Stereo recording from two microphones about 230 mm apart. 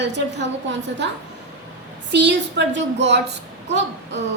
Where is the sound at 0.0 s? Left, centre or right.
Right.